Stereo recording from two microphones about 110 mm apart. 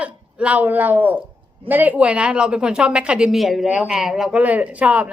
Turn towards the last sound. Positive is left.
turn(degrees=-10)  # may be behind; listen again after turning